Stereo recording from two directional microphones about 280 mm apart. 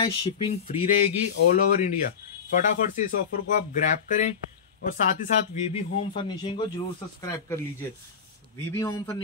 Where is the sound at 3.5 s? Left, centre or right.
Left.